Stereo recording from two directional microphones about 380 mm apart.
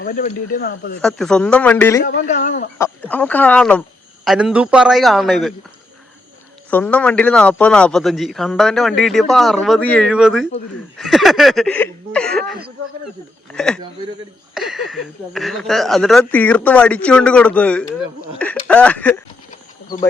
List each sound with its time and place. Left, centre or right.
0.0 s speech: left
1.0 s a man's voice: centre
2.0 s speech: centre
2.7 s a man's voice: centre
6.7 s a man's voice: centre